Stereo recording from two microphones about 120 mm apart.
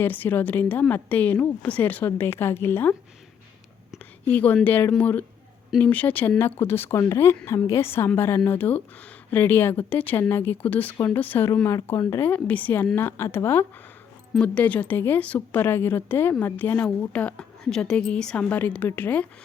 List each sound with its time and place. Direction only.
0.0 s a woman's voice: 15° left (ahead or behind)
3.9 s a woman's voice: 15° left (ahead or behind)